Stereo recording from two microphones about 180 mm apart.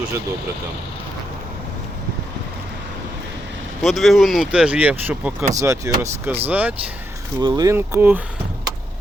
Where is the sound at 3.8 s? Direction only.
Centre (ahead or behind).